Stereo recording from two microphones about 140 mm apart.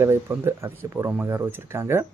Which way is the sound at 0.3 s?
15° right (ahead or behind).